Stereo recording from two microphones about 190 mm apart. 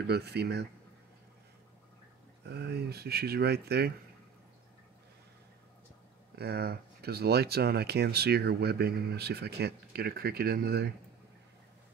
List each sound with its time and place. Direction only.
0.0 s speech: 60° right (ahead or behind)
2.4 s speech: 60° right (ahead or behind)
6.3 s speech: 55° right (ahead or behind)